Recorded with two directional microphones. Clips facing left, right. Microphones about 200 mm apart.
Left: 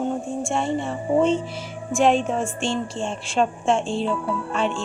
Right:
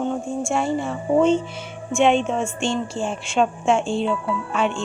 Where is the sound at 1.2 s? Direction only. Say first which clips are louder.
Right 3 dB; 35° left (ahead or behind).